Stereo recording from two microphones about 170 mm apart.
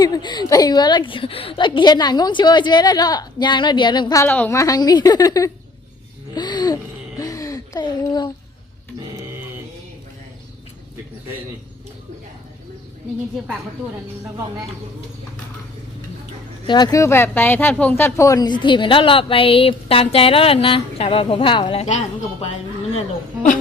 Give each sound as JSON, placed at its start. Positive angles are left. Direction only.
{"t": 0.0, "sound": "speech", "side_deg": 25}
{"t": 6.3, "sound": "a sound", "side_deg": 25}
{"t": 16.6, "sound": "speech", "side_deg": 25}